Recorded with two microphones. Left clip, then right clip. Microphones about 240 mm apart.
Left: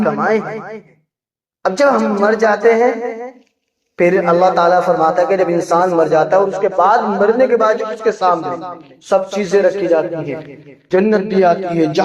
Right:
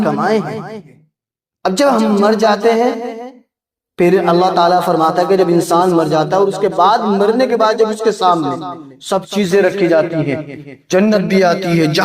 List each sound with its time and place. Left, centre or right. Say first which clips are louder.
0.0 s a man's voice: even; right